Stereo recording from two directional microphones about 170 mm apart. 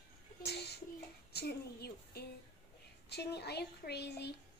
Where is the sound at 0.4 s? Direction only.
75° left (ahead or behind).